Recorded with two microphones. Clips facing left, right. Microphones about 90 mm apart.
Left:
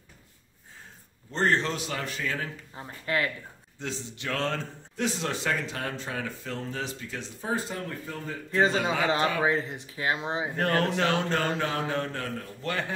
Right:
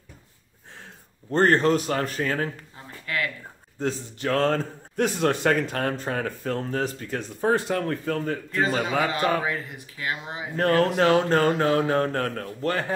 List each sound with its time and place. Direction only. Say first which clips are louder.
1.3 s a man's voice: right 7 dB; 50° right (ahead or behind)
2.7 s speech: left 2 dB; 25° left (ahead or behind)
3.8 s a man's voice: right 8 dB; 45° right (ahead or behind); by 8.5 s 65° right (ahead or behind)
9.0 s speech: right 1 dB; 30° left (ahead or behind)
11.0 s speech: right 7 dB; 40° right (ahead or behind)